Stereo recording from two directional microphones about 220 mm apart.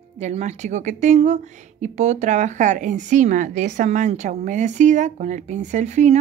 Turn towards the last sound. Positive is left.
turn(degrees=-30)  # may be behind; listen again after turning